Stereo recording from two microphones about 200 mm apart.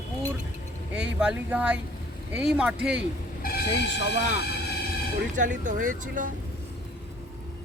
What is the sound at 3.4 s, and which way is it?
Vehicle, 45° left (ahead or behind).